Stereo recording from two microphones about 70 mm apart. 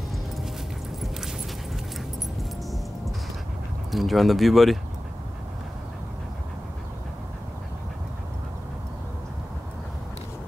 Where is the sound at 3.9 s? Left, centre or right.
Centre.